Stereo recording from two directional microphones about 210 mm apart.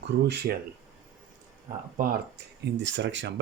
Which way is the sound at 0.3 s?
50° right (ahead or behind).